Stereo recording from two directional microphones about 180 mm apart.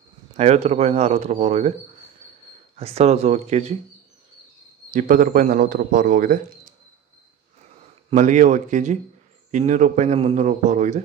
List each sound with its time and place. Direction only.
0.4 s a man's voice: 40° right (ahead or behind)
2.7 s a man's voice: 35° right (ahead or behind)
4.9 s a man's voice: 50° right (ahead or behind)
8.1 s a man's voice: 45° right (ahead or behind)